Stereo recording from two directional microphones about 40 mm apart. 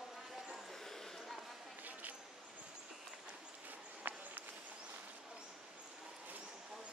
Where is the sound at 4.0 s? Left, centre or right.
Right.